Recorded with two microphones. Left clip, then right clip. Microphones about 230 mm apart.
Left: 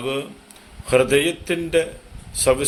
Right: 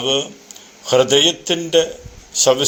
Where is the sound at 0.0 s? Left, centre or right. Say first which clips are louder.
Right 7 dB; centre.